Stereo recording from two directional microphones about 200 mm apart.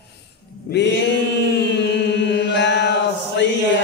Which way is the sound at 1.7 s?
60° left (ahead or behind).